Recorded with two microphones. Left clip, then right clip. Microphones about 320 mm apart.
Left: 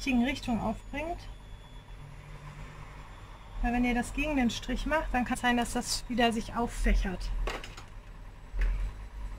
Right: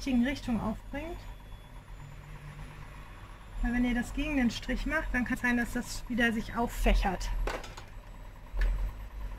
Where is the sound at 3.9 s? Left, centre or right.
Centre.